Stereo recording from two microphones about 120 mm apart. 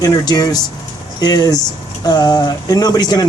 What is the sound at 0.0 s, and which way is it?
Speech, 30° left (ahead or behind).